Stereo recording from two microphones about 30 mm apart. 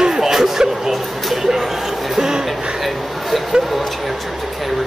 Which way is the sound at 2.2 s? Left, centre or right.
Centre.